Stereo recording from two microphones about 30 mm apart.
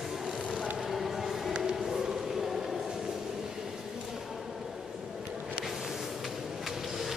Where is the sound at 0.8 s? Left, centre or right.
Centre.